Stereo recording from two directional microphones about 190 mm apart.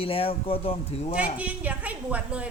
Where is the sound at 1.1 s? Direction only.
5° right (ahead or behind).